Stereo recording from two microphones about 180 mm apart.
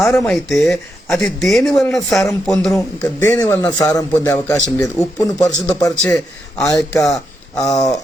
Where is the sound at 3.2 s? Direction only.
20° left (ahead or behind).